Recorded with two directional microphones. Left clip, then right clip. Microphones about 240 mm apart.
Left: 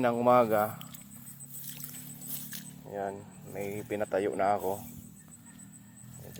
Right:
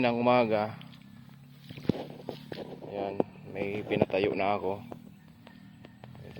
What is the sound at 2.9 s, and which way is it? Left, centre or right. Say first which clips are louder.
Speech: even; centre.